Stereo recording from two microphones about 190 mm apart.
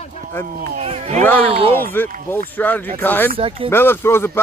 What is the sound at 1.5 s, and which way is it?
Speech, 30° right (ahead or behind).